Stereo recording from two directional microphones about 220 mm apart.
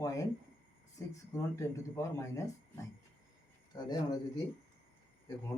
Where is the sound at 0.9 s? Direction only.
15° left (ahead or behind).